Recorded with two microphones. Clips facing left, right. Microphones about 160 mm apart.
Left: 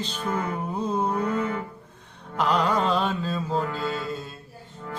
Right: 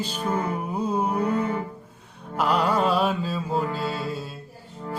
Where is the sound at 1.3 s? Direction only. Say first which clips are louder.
Right 2 dB; 30° right (ahead or behind).